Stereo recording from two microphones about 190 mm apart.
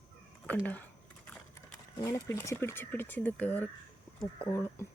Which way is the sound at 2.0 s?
15° left (ahead or behind).